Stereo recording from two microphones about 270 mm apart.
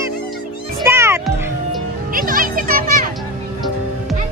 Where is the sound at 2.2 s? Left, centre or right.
Right.